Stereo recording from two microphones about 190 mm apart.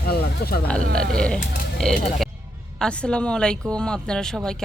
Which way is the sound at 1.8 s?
Centre (ahead or behind).